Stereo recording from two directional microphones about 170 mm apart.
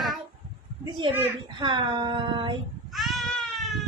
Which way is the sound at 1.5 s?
30° right (ahead or behind).